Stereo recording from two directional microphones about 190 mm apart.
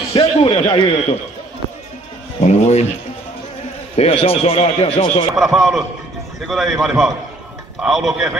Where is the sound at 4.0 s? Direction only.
30° left (ahead or behind).